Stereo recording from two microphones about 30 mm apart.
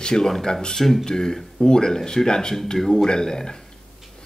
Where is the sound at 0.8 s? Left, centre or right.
Centre.